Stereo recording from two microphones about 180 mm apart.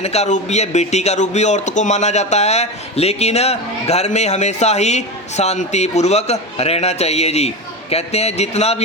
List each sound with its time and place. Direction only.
0.0 s a man's voice: 35° left (ahead or behind)